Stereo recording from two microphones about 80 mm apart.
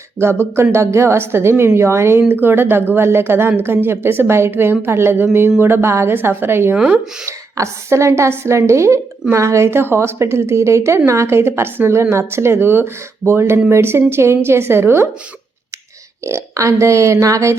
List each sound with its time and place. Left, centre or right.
0.2 s a woman's voice: right
6.7 s speech: centre
7.3 s a woman's voice: right
16.2 s a woman's voice: right